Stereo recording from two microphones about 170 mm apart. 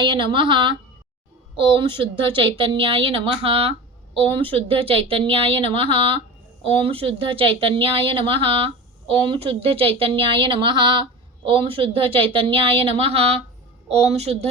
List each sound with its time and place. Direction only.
0.0 s a woman's voice: 30° right (ahead or behind)